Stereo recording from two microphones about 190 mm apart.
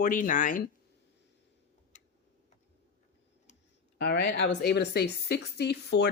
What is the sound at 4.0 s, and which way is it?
A woman's voice, 65° left (ahead or behind).